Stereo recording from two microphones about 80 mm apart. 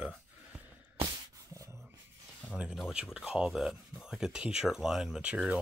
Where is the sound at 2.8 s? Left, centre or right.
Centre.